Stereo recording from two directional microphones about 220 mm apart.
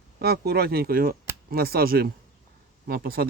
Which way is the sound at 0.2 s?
45° right (ahead or behind).